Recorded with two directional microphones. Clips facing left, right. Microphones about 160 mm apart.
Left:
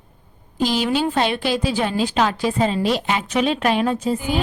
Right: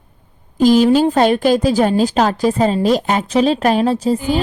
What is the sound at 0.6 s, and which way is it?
A woman's voice, 45° right (ahead or behind).